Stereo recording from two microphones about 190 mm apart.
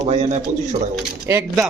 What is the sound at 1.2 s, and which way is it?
Speech, 15° right (ahead or behind).